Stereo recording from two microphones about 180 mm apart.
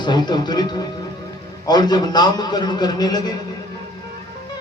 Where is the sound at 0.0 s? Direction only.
25° left (ahead or behind).